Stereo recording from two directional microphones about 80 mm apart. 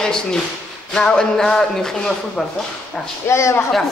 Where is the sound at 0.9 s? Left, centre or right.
Centre.